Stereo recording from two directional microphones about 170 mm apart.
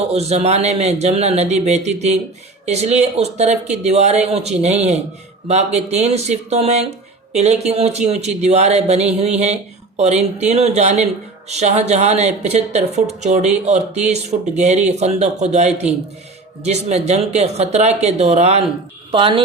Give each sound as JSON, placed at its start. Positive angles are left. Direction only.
{"t": 0.1, "sound": "a woman's voice", "side_deg": -40}